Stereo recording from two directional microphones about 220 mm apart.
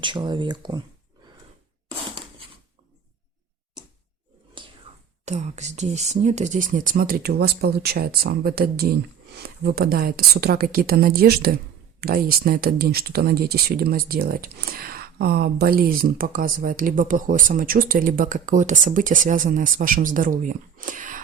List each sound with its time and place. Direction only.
0.0 s speech: 20° right (ahead or behind)
4.6 s whispering: 20° right (ahead or behind)
5.2 s speech: 30° right (ahead or behind)